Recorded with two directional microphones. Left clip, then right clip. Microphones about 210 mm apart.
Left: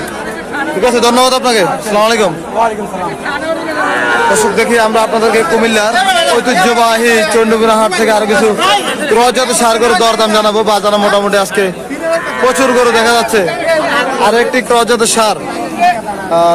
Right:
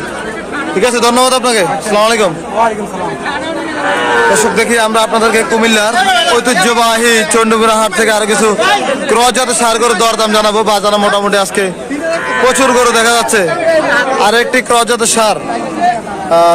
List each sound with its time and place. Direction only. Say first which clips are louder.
0.8 s speech: left 1 dB; 15° right (ahead or behind)
1.1 s a man's voice: even; 5° right (ahead or behind)
4.3 s speech: even; 5° right (ahead or behind)
8.5 s speech: even; 50° left (ahead or behind)
9.2 s speech: left 2 dB; 15° right (ahead or behind)